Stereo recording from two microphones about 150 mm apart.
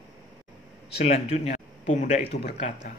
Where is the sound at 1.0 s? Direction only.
45° left (ahead or behind).